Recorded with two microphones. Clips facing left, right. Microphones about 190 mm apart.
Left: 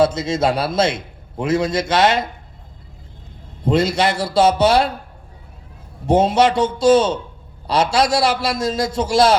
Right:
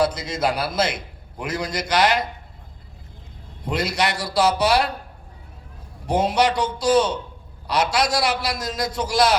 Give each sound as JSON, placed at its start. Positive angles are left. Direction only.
{"t": 0.0, "sound": "a man's voice", "side_deg": 25}
{"t": 3.6, "sound": "a man's voice", "side_deg": 25}
{"t": 6.1, "sound": "a man's voice", "side_deg": 25}